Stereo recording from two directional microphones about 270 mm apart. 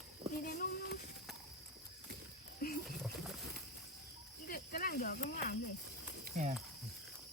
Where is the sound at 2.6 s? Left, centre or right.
Left.